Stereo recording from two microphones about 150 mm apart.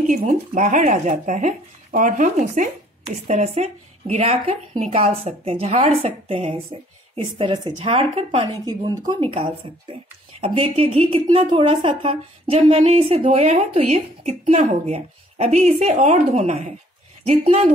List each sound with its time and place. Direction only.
0.0 s speech: 60° right (ahead or behind); by 8.5 s 40° right (ahead or behind)
8.6 s speech: 25° right (ahead or behind)
9.2 s speech: 40° right (ahead or behind)